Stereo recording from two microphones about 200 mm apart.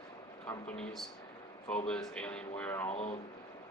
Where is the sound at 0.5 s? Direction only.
5° left (ahead or behind).